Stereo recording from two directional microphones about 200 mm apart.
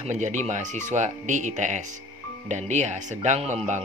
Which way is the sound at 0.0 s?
35° right (ahead or behind).